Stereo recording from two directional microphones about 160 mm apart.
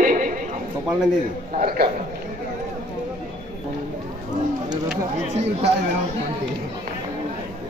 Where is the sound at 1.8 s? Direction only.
70° right (ahead or behind).